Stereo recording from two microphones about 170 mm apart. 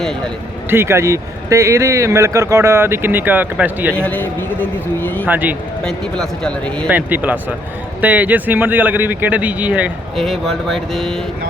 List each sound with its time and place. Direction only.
0.7 s speech: 15° right (ahead or behind)
3.9 s a man's voice: 10° left (ahead or behind)
5.3 s speech: 10° right (ahead or behind)
5.8 s speech: 5° left (ahead or behind)
6.9 s speech: 10° right (ahead or behind)